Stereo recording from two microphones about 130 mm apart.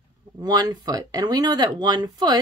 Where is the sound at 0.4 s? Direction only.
30° right (ahead or behind).